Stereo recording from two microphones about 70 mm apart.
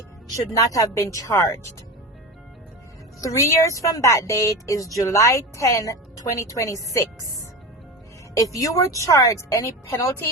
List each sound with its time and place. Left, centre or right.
0.5 s a woman's voice: left
3.2 s a woman's voice: left
8.4 s a woman's voice: left